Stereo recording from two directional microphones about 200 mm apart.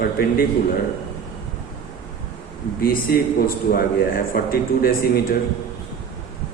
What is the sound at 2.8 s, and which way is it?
A man's voice, 50° left (ahead or behind).